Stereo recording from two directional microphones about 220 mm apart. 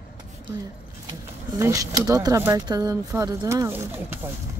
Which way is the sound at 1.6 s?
15° right (ahead or behind).